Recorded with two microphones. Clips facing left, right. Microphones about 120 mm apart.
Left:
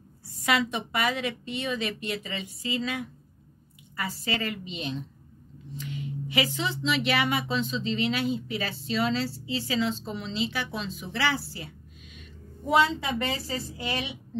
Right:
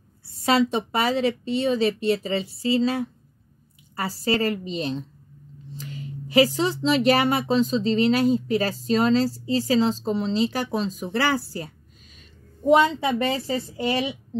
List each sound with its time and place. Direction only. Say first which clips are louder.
0.2 s speech: right 6 dB; 30° right (ahead or behind)
12.2 s a sound: right 6 dB; 30° right (ahead or behind)
13.3 s speech: right 6 dB; 30° right (ahead or behind)